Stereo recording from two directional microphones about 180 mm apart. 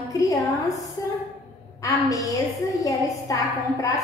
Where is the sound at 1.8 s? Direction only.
20° left (ahead or behind).